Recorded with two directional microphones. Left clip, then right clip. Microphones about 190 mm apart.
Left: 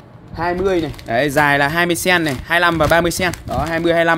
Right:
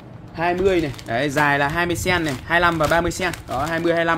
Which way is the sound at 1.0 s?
40° left (ahead or behind).